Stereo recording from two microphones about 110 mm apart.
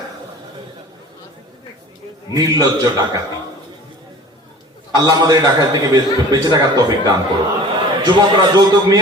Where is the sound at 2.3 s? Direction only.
35° right (ahead or behind).